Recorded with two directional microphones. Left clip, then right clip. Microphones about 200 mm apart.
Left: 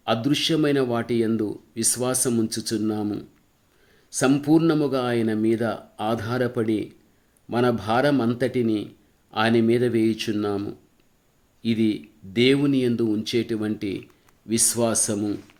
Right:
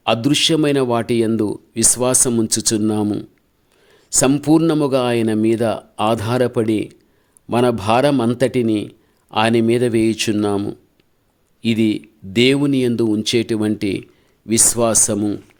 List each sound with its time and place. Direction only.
0.0 s speech: 45° right (ahead or behind)